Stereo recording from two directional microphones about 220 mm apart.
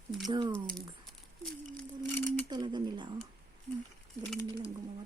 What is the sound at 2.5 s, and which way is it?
Speech, 20° right (ahead or behind).